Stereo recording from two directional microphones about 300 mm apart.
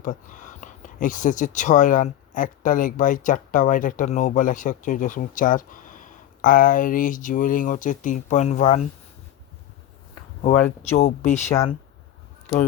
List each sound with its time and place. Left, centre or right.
0.0 s speech: left
10.8 s speech: left